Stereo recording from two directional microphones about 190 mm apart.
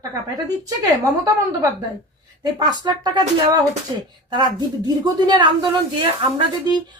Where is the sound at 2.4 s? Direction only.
20° right (ahead or behind).